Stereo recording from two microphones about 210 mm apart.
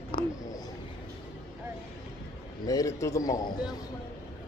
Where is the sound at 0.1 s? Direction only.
15° left (ahead or behind).